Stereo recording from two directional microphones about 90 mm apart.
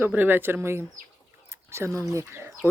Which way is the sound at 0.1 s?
20° right (ahead or behind).